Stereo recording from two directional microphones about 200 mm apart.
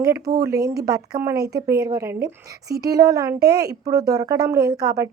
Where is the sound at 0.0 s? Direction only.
15° right (ahead or behind).